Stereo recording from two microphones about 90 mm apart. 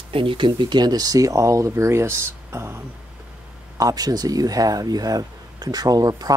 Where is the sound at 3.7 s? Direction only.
45° right (ahead or behind).